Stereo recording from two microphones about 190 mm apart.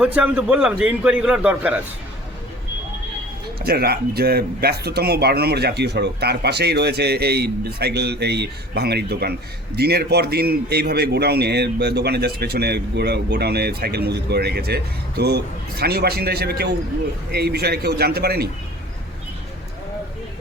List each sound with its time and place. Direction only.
0.0 s a man's voice: 10° right (ahead or behind)
3.6 s speech: 55° right (ahead or behind)